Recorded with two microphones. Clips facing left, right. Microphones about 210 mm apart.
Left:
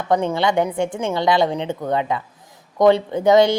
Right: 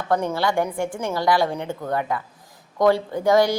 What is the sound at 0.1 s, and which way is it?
A woman's voice, 20° left (ahead or behind).